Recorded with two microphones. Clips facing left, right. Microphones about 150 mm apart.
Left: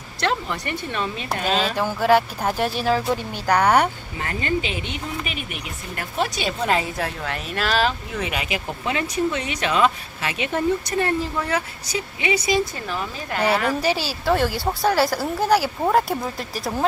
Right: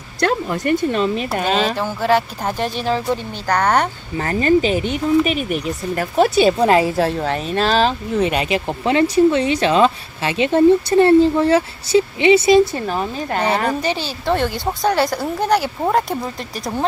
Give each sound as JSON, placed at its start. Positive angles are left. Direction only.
{"t": 0.2, "sound": "speech", "side_deg": -45}
{"t": 1.7, "sound": "speech", "side_deg": 10}
{"t": 4.2, "sound": "speech", "side_deg": -35}
{"t": 12.9, "sound": "speech", "side_deg": -40}
{"t": 13.8, "sound": "speech", "side_deg": 5}